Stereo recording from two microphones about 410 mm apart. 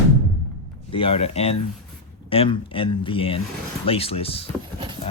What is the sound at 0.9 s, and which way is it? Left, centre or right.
Speech, centre.